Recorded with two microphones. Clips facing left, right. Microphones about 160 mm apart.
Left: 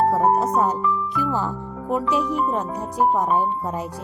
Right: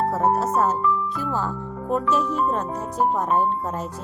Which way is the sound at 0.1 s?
15° left (ahead or behind).